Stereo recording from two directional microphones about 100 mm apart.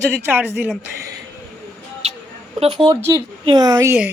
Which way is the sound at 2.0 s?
90° right.